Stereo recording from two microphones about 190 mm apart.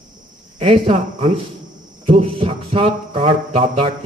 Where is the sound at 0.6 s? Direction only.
30° right (ahead or behind).